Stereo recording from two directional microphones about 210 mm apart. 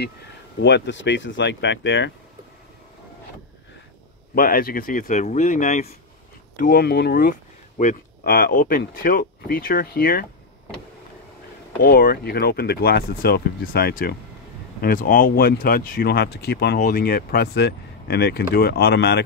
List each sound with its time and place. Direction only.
0.6 s speech: 55° left (ahead or behind)
4.4 s speech: 45° left (ahead or behind)
11.8 s speech: 45° left (ahead or behind)